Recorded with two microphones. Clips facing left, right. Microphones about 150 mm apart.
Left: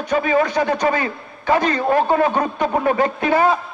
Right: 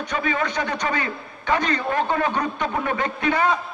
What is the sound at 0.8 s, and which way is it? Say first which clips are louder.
A man's voice: left 6 dB; 35° left (ahead or behind).